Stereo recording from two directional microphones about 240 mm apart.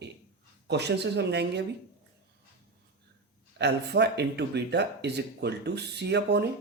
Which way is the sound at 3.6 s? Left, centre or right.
Right.